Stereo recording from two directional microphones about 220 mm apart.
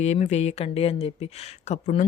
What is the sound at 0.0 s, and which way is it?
Speech, 30° left (ahead or behind).